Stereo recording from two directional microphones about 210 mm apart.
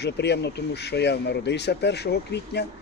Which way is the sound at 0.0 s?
55° left (ahead or behind).